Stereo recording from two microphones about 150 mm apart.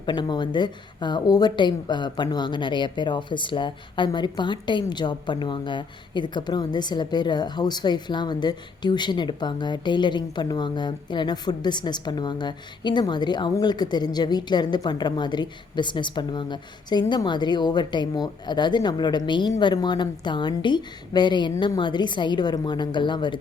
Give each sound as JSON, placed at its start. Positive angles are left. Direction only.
{"t": 0.0, "sound": "a woman's voice", "side_deg": 30}